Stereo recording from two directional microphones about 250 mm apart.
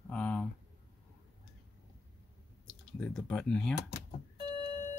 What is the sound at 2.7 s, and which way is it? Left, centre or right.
Speech, centre.